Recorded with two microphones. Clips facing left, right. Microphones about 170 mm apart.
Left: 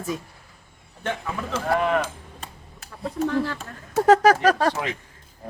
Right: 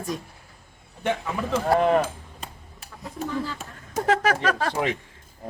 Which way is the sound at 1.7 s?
35° right (ahead or behind).